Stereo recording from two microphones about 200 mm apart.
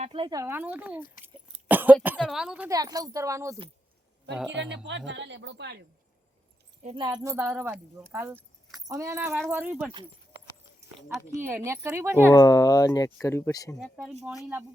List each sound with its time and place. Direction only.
0.0 s speech: 25° right (ahead or behind); by 1.0 s 10° right (ahead or behind)
1.6 s a sound: 10° right (ahead or behind)
2.2 s speech: 5° right (ahead or behind)
2.6 s speech: 20° right (ahead or behind)
4.5 s speech: 65° right (ahead or behind)
6.8 s speech: 20° right (ahead or behind); by 9.9 s 5° right (ahead or behind)
11.3 s speech: 10° right (ahead or behind)
12.3 s speech: 15° left (ahead or behind)
13.7 s speech: centre (ahead or behind)